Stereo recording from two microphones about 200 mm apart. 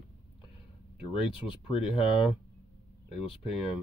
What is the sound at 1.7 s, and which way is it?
Speech, 25° left (ahead or behind).